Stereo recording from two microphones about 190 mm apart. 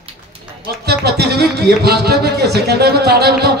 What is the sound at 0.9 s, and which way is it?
Speech, 60° right (ahead or behind).